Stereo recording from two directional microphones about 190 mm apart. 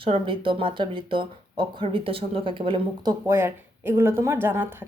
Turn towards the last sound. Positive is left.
turn(degrees=-10)  # may be behind; listen again after turning